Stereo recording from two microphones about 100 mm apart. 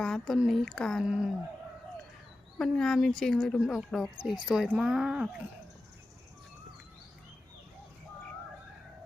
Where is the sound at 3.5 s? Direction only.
5° right (ahead or behind).